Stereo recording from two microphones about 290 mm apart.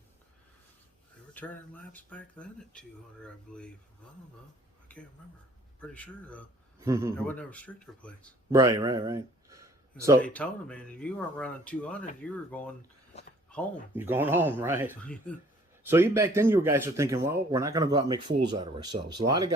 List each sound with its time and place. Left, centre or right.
1.3 s speech: centre
5.8 s speech: centre
6.7 s speech: centre
7.2 s speech: centre
8.4 s speech: centre
10.2 s speech: centre
13.5 s a sound: centre
13.9 s speech: centre
15.0 s speech: centre
15.9 s speech: centre